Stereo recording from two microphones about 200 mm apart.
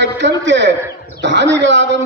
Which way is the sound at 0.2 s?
60° right (ahead or behind).